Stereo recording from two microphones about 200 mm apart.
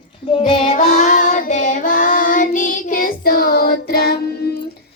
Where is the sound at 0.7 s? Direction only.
40° left (ahead or behind).